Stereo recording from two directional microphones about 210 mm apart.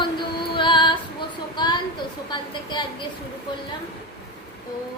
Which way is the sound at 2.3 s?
20° left (ahead or behind).